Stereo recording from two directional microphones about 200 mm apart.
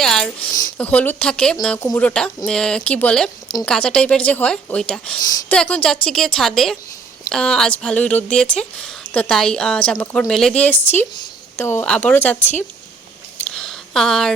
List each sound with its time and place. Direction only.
0.0 s speech: 5° left (ahead or behind)
5.2 s speech: 15° left (ahead or behind)
5.5 s speech: 5° left (ahead or behind)